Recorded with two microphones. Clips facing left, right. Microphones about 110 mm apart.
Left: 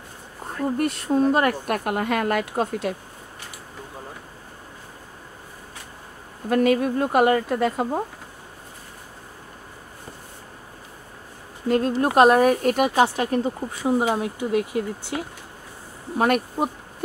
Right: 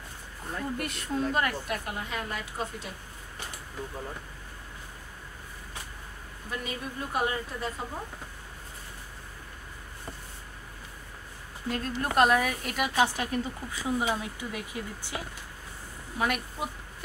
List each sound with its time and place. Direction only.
0.7 s speech: 45° left (ahead or behind); by 2.9 s 65° left (ahead or behind)
6.5 s speech: 70° left (ahead or behind)
11.6 s speech: 50° left (ahead or behind)
14.2 s speech: 65° left (ahead or behind)
16.2 s speech: 45° left (ahead or behind)